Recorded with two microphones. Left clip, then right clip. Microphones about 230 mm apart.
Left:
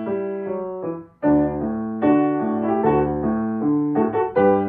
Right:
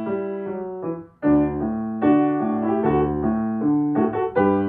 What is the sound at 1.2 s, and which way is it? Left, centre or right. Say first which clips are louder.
Keyboard: left 1 dB; centre.